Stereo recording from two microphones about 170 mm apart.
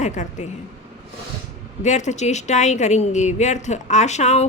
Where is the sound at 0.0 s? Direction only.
45° left (ahead or behind).